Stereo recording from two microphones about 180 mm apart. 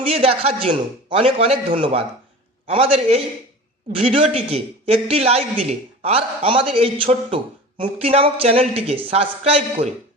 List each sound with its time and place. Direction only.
0.0 s speech: 35° right (ahead or behind)